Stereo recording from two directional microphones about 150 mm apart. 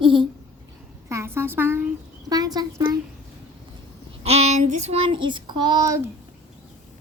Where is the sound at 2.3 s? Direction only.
25° right (ahead or behind).